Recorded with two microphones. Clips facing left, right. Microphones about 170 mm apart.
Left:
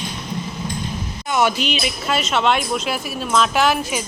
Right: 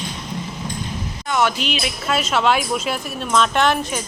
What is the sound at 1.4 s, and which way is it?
A woman's voice, centre (ahead or behind).